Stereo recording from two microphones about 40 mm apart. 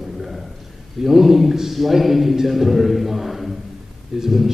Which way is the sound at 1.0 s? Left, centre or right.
Centre.